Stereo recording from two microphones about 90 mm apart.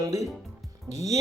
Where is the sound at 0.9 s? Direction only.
50° right (ahead or behind).